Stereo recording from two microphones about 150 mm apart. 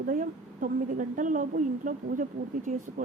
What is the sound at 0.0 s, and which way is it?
A woman's voice, 60° right (ahead or behind).